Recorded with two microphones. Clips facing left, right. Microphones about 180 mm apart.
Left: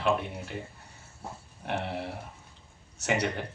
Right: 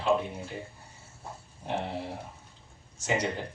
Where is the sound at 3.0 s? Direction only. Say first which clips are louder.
Left 1 dB; 65° left (ahead or behind).